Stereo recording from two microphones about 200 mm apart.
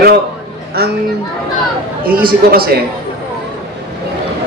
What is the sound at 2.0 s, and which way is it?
Speech, 50° right (ahead or behind).